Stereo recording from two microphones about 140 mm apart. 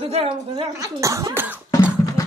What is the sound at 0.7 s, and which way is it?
Speech, 25° right (ahead or behind).